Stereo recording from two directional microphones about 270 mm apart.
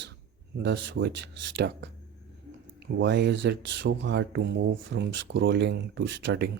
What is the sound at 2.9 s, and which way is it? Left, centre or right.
Speech, right.